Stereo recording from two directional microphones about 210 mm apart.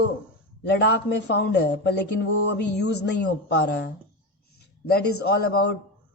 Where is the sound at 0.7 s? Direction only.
55° left (ahead or behind).